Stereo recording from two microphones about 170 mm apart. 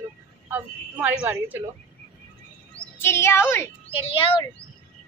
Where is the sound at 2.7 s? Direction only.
10° left (ahead or behind).